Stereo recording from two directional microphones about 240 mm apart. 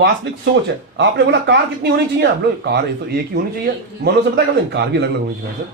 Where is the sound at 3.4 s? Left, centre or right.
Right.